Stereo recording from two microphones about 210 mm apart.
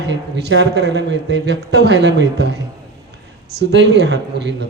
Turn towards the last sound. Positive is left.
turn(degrees=-55)  # may be behind; listen again after turning